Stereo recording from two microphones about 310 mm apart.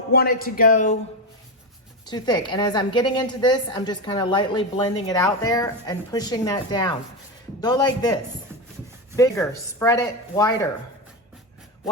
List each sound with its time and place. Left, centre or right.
0.1 s speech: left
2.0 s a woman's voice: centre
9.1 s a woman's voice: centre